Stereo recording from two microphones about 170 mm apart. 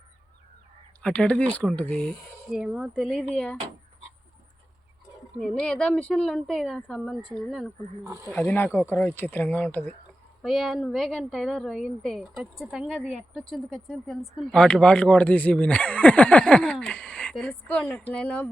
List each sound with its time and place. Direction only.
1.0 s a woman's voice: 5° left (ahead or behind)
5.4 s a woman's voice: 5° left (ahead or behind)
8.0 s speech: 20° right (ahead or behind)
8.3 s a woman's voice: 10° left (ahead or behind)